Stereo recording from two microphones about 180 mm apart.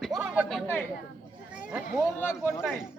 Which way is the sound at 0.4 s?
5° left (ahead or behind).